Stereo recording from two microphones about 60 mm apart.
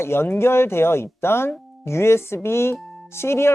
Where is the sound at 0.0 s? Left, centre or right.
Left.